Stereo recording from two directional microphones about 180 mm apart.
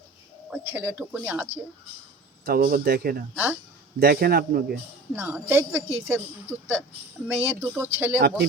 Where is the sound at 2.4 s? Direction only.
55° right (ahead or behind).